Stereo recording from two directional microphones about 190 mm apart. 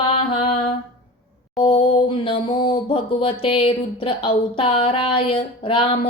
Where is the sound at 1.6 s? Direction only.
25° left (ahead or behind).